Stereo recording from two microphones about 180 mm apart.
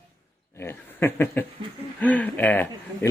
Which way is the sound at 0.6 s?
15° left (ahead or behind).